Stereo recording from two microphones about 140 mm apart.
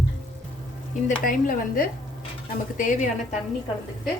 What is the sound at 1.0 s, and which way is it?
Speech, 70° left (ahead or behind).